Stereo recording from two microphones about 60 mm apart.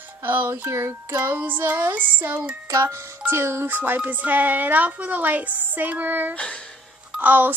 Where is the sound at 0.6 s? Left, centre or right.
Right.